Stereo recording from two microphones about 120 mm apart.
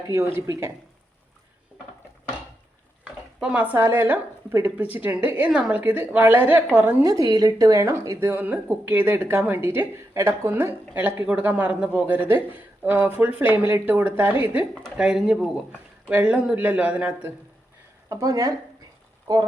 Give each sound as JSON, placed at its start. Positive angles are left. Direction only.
{"t": 0.3, "sound": "speech", "side_deg": -25}
{"t": 3.0, "sound": "a sound", "side_deg": -10}
{"t": 3.8, "sound": "speech", "side_deg": -20}
{"t": 7.1, "sound": "speech", "side_deg": -30}
{"t": 14.9, "sound": "speech", "side_deg": -5}
{"t": 18.1, "sound": "speech", "side_deg": -30}